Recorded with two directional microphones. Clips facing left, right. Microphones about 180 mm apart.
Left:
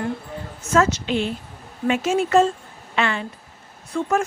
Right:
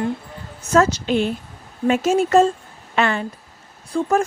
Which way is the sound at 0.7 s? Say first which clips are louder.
Right 3 dB; 40° right (ahead or behind).